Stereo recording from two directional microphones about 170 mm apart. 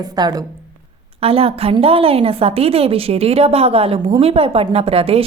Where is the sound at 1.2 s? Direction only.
35° right (ahead or behind).